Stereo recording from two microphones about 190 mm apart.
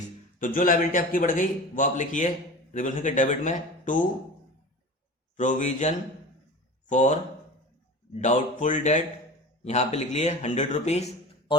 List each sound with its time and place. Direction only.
0.3 s a man's voice: 45° left (ahead or behind)
5.4 s a man's voice: 40° left (ahead or behind)